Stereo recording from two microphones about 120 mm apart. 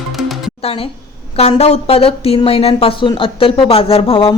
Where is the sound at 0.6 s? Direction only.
50° left (ahead or behind).